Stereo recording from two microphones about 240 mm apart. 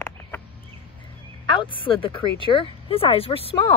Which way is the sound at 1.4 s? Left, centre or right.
Left.